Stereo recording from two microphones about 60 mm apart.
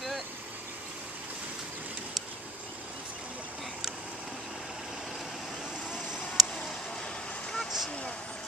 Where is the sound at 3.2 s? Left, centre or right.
Right.